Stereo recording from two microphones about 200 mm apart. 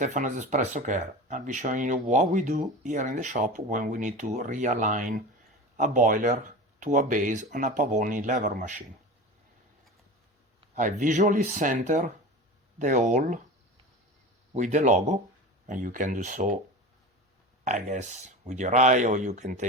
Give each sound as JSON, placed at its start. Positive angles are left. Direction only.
{"t": 0.0, "sound": "speech", "side_deg": -40}
{"t": 10.8, "sound": "speech", "side_deg": -40}
{"t": 14.5, "sound": "speech", "side_deg": -35}
{"t": 17.7, "sound": "speech", "side_deg": -35}